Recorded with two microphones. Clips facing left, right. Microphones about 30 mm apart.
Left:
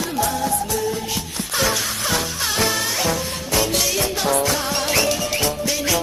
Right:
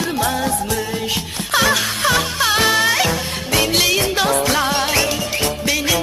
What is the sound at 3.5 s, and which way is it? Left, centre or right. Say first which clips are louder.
Music: right 5 dB; right.